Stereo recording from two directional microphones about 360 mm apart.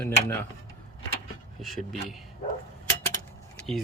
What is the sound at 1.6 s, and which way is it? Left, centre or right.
Speech, centre.